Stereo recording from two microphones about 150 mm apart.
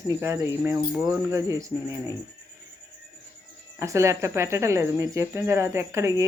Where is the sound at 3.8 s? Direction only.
20° right (ahead or behind).